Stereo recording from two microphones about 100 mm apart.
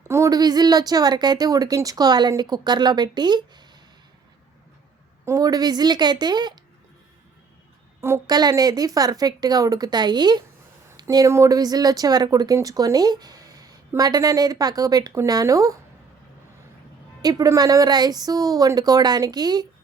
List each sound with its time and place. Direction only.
0.0 s a woman's voice: 30° right (ahead or behind); by 3.7 s 45° right (ahead or behind)
5.2 s a woman's voice: 35° right (ahead or behind)
8.3 s speech: 40° right (ahead or behind)
11.1 s speech: 35° right (ahead or behind)
17.2 s speech: 40° right (ahead or behind)